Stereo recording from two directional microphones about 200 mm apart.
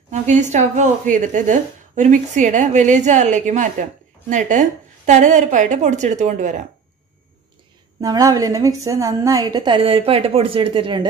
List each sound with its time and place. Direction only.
0.1 s a woman's voice: 35° right (ahead or behind)
8.0 s a woman's voice: 20° right (ahead or behind)